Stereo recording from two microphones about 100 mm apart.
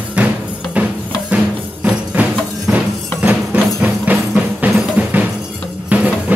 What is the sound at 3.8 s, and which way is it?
Music, 15° right (ahead or behind).